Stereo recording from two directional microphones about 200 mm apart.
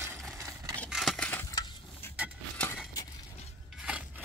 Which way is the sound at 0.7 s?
5° left (ahead or behind).